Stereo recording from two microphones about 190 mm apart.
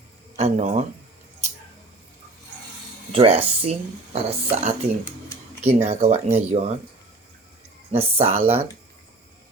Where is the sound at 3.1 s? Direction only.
30° right (ahead or behind).